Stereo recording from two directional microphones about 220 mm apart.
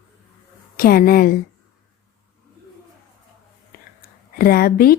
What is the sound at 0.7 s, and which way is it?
Speech, 40° left (ahead or behind).